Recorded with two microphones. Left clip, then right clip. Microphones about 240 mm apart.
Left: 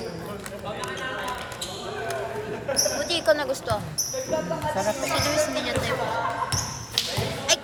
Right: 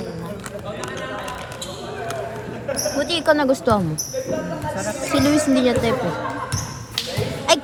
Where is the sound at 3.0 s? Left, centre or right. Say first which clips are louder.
Right 8 dB; right.